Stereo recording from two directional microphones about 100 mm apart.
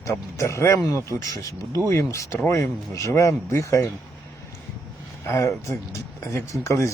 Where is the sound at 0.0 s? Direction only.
30° left (ahead or behind).